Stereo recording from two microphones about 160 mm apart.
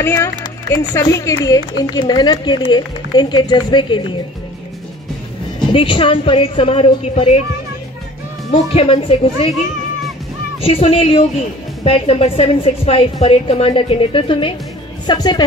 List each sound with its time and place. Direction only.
0.1 s speech: 25° left (ahead or behind)
5.7 s a woman's voice: 35° left (ahead or behind)
8.7 s a woman's voice: 35° left (ahead or behind)
10.6 s a woman's voice: 40° left (ahead or behind)